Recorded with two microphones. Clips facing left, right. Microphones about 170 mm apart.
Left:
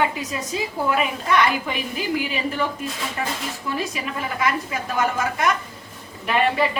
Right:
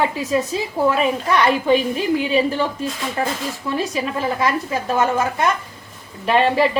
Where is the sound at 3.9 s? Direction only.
30° right (ahead or behind).